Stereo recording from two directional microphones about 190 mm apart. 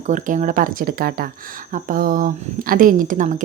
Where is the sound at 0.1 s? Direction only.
40° right (ahead or behind).